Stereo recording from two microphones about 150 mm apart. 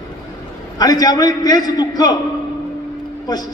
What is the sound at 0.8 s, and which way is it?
A man's voice, 25° left (ahead or behind).